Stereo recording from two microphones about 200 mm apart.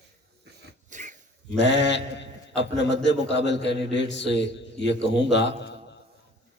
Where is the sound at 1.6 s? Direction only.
60° left (ahead or behind).